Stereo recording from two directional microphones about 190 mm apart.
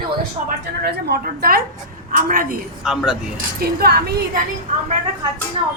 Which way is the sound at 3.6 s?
55° right (ahead or behind).